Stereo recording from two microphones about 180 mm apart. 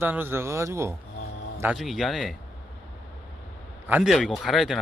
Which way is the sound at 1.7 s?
Centre (ahead or behind).